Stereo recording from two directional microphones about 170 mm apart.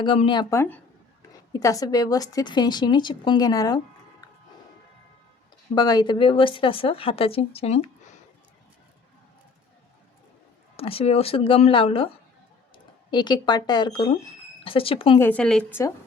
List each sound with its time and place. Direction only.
0.0 s a woman's voice: 30° left (ahead or behind)
0.5 s a woman's voice: 15° left (ahead or behind)
5.7 s speech: 25° left (ahead or behind)
10.8 s speech: 35° left (ahead or behind)
15.2 s speech: 10° left (ahead or behind)